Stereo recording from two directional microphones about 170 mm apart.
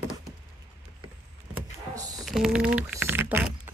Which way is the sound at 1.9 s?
20° right (ahead or behind).